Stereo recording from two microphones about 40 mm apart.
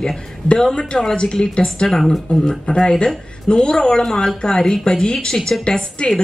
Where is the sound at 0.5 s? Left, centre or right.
Left.